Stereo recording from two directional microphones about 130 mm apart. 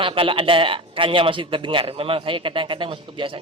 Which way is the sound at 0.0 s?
45° right (ahead or behind).